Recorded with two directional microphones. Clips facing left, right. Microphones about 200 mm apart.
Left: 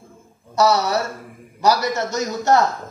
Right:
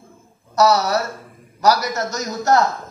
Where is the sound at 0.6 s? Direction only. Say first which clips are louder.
Right 1 dB; 30° left (ahead or behind).